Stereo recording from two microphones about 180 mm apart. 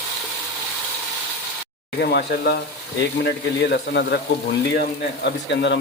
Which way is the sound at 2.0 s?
65° left (ahead or behind).